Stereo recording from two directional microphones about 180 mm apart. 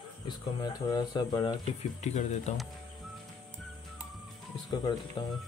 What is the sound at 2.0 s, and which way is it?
Speech, 40° left (ahead or behind).